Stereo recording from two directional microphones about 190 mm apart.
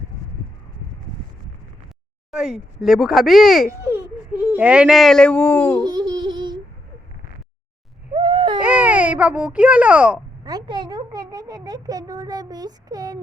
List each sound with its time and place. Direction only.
2.3 s speech: centre (ahead or behind)
3.7 s speech: 10° right (ahead or behind); by 5.8 s 10° left (ahead or behind)
5.8 s laughter: 20° right (ahead or behind)
8.1 s a sound: 25° right (ahead or behind)
8.6 s a child's voice: 10° right (ahead or behind)
10.4 s speech: 20° right (ahead or behind)